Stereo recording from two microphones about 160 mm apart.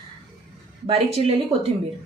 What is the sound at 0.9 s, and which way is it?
Speech, 40° right (ahead or behind).